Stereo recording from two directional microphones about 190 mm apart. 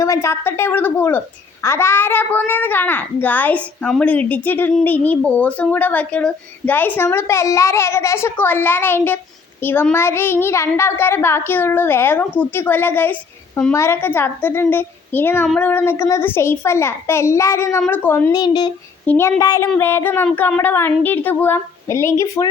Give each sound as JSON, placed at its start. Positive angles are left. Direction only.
{"t": 0.0, "sound": "a child's voice", "side_deg": 15}
{"t": 18.3, "sound": "speech", "side_deg": 20}
{"t": 19.0, "sound": "a child's voice", "side_deg": 10}